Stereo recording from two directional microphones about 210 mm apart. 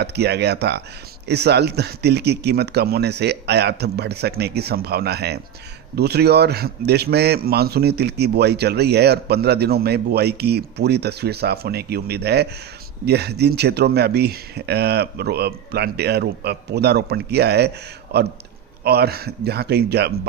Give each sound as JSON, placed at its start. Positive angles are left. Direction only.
{"t": 0.0, "sound": "a man's voice", "side_deg": -50}
{"t": 18.9, "sound": "a man's voice", "side_deg": -50}